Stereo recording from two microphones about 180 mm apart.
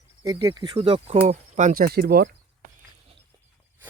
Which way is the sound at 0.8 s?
35° right (ahead or behind).